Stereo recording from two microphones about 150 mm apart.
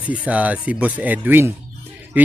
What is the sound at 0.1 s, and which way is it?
Speech, 10° right (ahead or behind).